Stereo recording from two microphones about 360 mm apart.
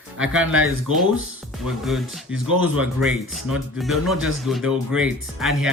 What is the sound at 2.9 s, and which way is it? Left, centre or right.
Speech, centre.